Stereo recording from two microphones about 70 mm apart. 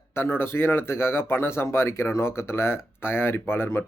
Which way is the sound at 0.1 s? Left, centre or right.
Left.